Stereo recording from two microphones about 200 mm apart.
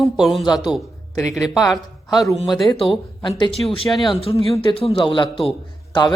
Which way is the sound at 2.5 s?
25° left (ahead or behind).